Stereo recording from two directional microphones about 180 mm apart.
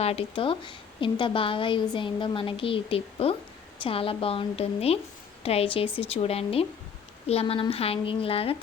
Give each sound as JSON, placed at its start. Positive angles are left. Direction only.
{"t": 0.0, "sound": "a woman's voice", "side_deg": 35}